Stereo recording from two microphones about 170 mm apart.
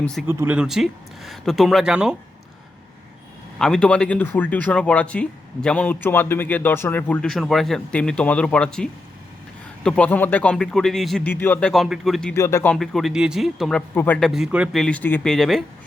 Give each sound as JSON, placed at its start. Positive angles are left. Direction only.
{"t": 0.0, "sound": "speech", "side_deg": 5}
{"t": 0.3, "sound": "speech", "side_deg": -10}
{"t": 3.6, "sound": "speech", "side_deg": 5}
{"t": 11.7, "sound": "speech", "side_deg": 0}
{"t": 12.3, "sound": "speech", "side_deg": 15}
{"t": 12.7, "sound": "speech", "side_deg": 0}